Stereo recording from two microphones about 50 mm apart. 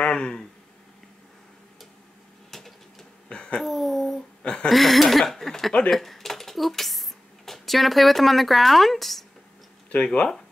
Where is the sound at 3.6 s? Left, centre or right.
Centre.